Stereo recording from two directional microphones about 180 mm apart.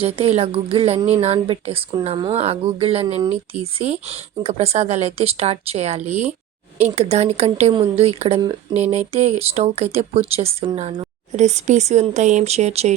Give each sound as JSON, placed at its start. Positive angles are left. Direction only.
{"t": 0.0, "sound": "a woman's voice", "side_deg": -35}